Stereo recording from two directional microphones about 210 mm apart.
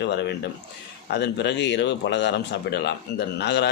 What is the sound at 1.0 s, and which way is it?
Speech, 55° left (ahead or behind).